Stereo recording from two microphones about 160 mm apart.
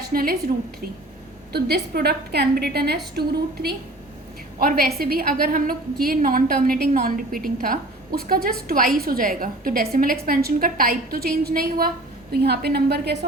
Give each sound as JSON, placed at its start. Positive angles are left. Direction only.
{"t": 0.1, "sound": "a woman's voice", "side_deg": -65}
{"t": 1.5, "sound": "a woman's voice", "side_deg": -85}
{"t": 4.6, "sound": "a woman's voice", "side_deg": -65}
{"t": 12.3, "sound": "a woman's voice", "side_deg": -90}